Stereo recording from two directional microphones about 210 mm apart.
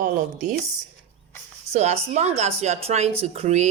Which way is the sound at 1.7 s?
30° right (ahead or behind).